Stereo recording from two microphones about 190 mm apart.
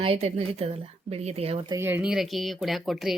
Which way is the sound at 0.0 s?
30° right (ahead or behind).